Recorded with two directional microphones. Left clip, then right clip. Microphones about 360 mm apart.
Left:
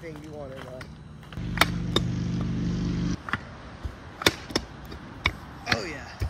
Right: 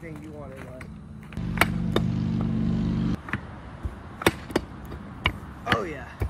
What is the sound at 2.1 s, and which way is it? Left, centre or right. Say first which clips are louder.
Vehicle: right 3 dB; right.